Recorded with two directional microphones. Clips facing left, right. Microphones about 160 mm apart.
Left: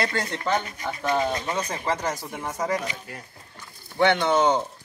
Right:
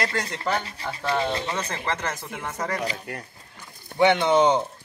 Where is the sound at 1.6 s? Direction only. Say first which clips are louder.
Left 2 dB; 10° left (ahead or behind).